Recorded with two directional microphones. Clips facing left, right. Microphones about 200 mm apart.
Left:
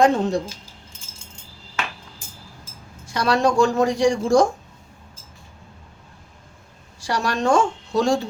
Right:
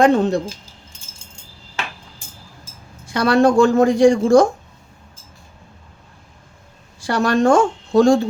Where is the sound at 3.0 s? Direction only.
55° right (ahead or behind).